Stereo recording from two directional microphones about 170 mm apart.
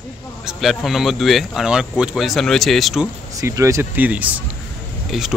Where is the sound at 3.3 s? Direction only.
15° right (ahead or behind); by 5.4 s centre (ahead or behind).